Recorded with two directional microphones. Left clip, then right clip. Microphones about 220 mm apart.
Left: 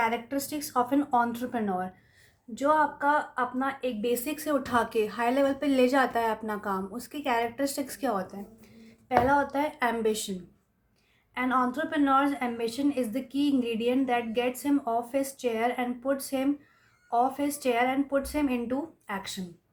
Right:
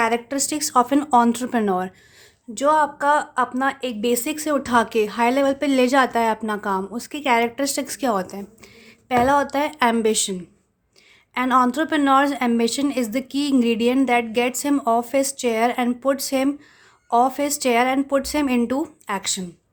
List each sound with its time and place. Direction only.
0.0 s a woman's voice: 50° right (ahead or behind)
11.3 s a woman's voice: 45° right (ahead or behind)